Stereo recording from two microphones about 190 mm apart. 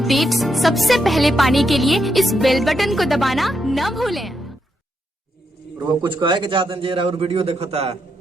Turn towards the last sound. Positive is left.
turn(degrees=-35)  # may be behind; listen again after turning